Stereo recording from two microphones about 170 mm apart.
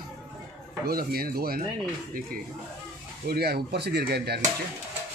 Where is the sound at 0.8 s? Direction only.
60° right (ahead or behind).